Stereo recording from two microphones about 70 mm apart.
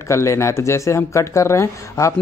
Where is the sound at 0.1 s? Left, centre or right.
Left.